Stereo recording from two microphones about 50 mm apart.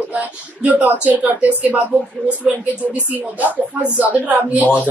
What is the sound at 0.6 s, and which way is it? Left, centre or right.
A woman's voice, right.